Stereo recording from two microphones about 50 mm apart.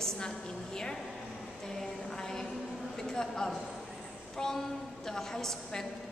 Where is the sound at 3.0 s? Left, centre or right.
Centre.